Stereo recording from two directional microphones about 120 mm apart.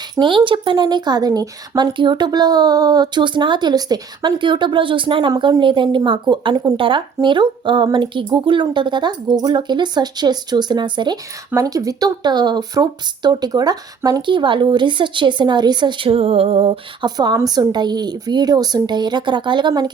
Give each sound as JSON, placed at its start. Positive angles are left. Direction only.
{"t": 0.2, "sound": "speech", "side_deg": -45}
{"t": 11.5, "sound": "speech", "side_deg": -30}
{"t": 17.3, "sound": "speech", "side_deg": -30}